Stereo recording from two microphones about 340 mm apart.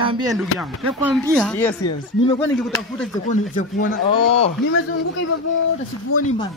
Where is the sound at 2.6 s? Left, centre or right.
Centre.